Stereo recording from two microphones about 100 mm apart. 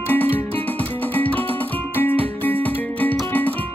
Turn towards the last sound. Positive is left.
turn(degrees=20)  # may be behind; listen again after turning